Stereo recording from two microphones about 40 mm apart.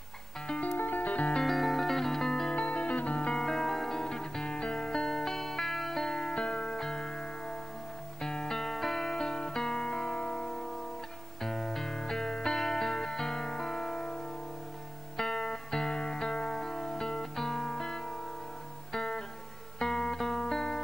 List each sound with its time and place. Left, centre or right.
0.7 s music: left
1.4 s music: centre
2.5 s music: left
3.3 s music: centre
9.0 s music: centre
11.4 s music: centre